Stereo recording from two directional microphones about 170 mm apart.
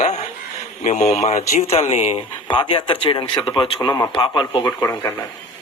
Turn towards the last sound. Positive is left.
turn(degrees=20)  # may be behind; listen again after turning